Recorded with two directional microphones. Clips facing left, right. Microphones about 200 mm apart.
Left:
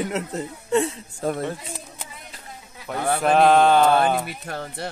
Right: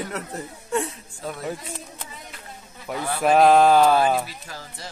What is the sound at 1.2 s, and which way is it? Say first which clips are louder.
Speech: left 8 dB; 45° left (ahead or behind).